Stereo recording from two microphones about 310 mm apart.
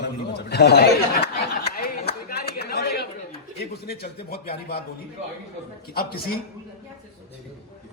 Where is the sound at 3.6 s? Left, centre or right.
Left.